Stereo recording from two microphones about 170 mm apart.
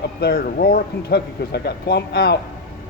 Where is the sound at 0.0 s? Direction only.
70° left (ahead or behind).